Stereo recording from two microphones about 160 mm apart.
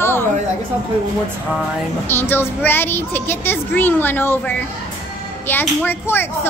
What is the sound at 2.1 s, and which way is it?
A woman's voice, 15° left (ahead or behind).